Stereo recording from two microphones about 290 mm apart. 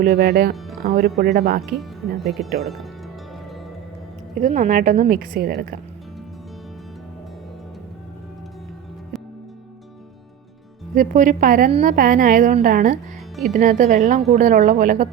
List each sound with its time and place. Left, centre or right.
0.0 s speech: right
1.7 s speech: centre
4.4 s a woman's voice: right
10.9 s a woman's voice: right